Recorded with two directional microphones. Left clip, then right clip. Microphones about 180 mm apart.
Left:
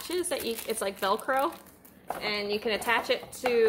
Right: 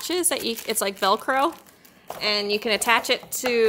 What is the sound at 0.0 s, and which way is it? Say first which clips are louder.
Speech: right 6 dB; 70° right (ahead or behind).